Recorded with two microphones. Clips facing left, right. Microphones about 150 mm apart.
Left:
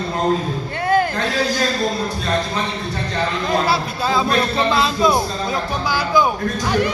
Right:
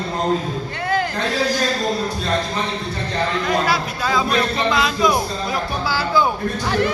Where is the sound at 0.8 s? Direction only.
50° left (ahead or behind).